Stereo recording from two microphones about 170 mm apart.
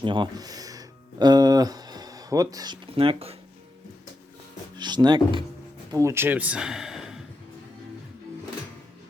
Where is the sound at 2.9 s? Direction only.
35° right (ahead or behind).